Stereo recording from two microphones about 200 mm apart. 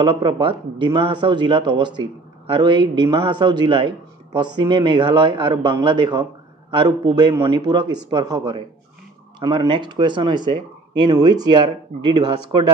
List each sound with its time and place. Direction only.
0.0 s a man's voice: 25° right (ahead or behind)